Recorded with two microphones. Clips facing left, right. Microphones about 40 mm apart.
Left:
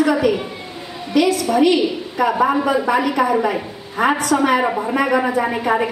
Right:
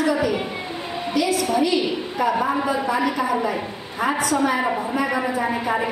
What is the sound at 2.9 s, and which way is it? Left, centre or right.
A woman's voice, left.